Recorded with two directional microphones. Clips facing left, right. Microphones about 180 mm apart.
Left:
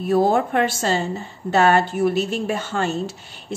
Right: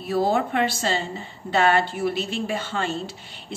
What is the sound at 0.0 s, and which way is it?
A woman's voice, 50° left (ahead or behind).